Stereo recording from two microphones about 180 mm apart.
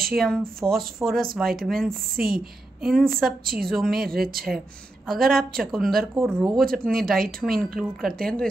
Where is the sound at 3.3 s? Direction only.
55° right (ahead or behind).